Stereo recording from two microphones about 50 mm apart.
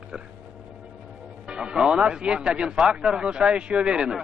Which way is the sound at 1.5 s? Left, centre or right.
Centre.